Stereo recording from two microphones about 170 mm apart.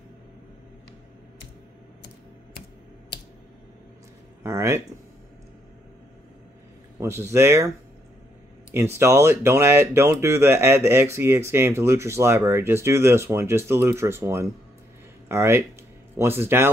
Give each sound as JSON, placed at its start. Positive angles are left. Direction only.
{"t": 4.4, "sound": "speech", "side_deg": -15}
{"t": 7.0, "sound": "speech", "side_deg": -15}
{"t": 8.7, "sound": "speech", "side_deg": -15}